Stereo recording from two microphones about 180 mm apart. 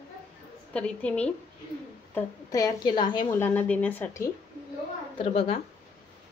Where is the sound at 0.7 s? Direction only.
5° left (ahead or behind).